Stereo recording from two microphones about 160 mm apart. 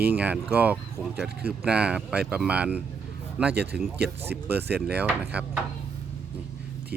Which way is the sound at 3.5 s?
90° right.